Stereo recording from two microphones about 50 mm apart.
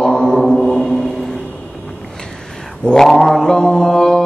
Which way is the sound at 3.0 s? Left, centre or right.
Centre.